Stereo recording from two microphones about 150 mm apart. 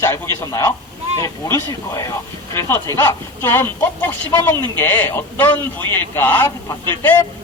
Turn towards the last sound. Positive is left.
turn(degrees=15)  # may be behind; listen again after turning